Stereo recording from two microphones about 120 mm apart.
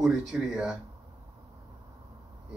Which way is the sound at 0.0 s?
Centre (ahead or behind).